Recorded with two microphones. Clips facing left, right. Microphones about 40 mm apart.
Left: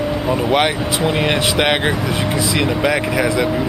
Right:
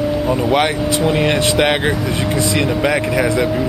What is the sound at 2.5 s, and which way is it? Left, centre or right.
Speech, centre.